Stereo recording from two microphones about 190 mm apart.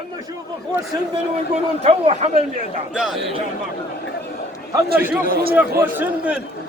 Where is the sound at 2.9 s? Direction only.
5° right (ahead or behind).